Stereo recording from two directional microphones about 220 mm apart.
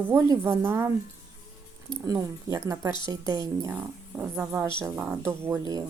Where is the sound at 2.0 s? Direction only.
15° right (ahead or behind).